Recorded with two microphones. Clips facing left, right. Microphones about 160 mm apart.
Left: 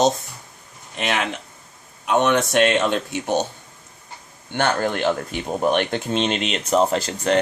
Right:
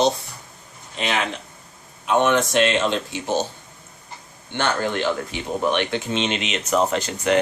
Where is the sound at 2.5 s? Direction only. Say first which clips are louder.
Left 1 dB; 55° left (ahead or behind).